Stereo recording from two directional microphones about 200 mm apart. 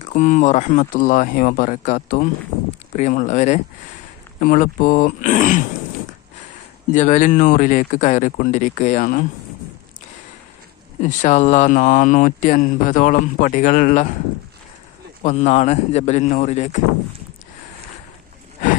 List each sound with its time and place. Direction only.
0.1 s speech: 40° left (ahead or behind)
6.9 s speech: 40° left (ahead or behind)
11.0 s speech: 40° left (ahead or behind)
15.2 s speech: 35° left (ahead or behind)